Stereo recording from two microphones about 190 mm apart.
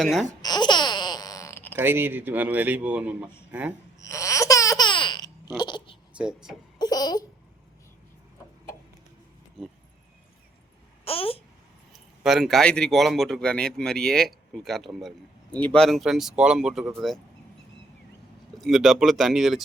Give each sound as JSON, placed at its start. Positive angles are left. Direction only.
{"t": 0.0, "sound": "speech", "side_deg": 0}
{"t": 0.4, "sound": "babbling", "side_deg": 20}
{"t": 1.7, "sound": "a man's voice", "side_deg": -10}
{"t": 4.0, "sound": "baby laughter", "side_deg": 15}
{"t": 5.5, "sound": "speech", "side_deg": 25}
{"t": 6.1, "sound": "speech", "side_deg": -5}
{"t": 6.7, "sound": "babbling", "side_deg": 20}
{"t": 11.0, "sound": "babbling", "side_deg": 30}
{"t": 11.9, "sound": "speech", "side_deg": 0}
{"t": 18.5, "sound": "speech", "side_deg": 0}